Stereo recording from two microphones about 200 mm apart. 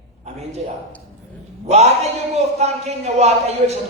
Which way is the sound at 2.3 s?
35° right (ahead or behind).